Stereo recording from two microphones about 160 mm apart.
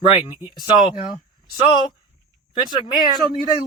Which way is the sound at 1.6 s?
30° left (ahead or behind).